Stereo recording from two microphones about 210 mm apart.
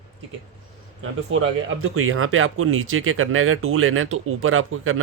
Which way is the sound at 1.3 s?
70° right (ahead or behind).